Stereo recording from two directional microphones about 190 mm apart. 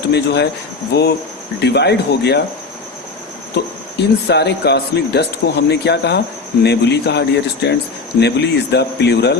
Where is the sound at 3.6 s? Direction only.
55° left (ahead or behind).